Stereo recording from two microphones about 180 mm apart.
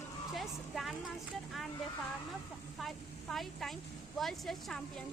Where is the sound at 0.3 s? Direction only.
Centre (ahead or behind).